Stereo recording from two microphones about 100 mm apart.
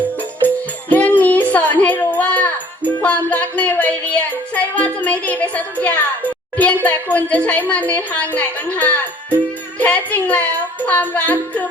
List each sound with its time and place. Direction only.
0.4 s music: 15° left (ahead or behind)
1.5 s a sound: 15° left (ahead or behind)
3.0 s music: 15° left (ahead or behind)
6.8 s a woman's voice: 15° left (ahead or behind)